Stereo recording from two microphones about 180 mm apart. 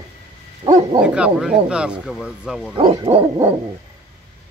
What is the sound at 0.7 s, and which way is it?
Bow-wow, 25° right (ahead or behind).